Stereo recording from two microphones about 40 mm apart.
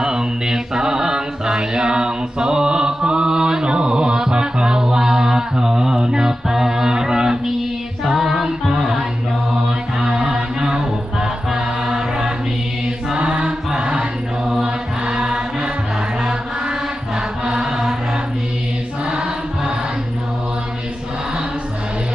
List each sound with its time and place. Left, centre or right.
0.0 s mantra: centre
8.0 s music: centre
10.0 s music: right
13.1 s choir: right
14.6 s music: right
17.4 s chant: centre